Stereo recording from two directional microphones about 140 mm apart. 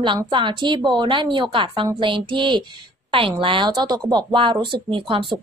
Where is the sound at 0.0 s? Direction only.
35° right (ahead or behind).